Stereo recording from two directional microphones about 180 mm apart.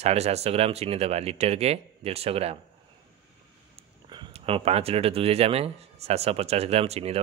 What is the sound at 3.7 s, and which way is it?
Speech, 30° right (ahead or behind).